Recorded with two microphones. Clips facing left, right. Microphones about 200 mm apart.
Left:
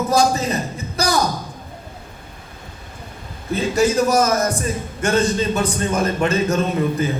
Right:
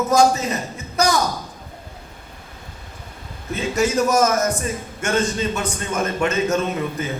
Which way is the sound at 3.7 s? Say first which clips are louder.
Left 2 dB; 35° left (ahead or behind).